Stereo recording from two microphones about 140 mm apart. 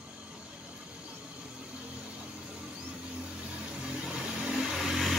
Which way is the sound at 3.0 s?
5° right (ahead or behind).